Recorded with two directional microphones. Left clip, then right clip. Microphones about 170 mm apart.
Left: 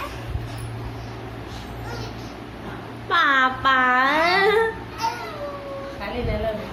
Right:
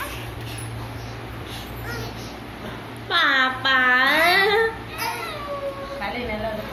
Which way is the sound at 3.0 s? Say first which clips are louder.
Left 1 dB; 10° left (ahead or behind).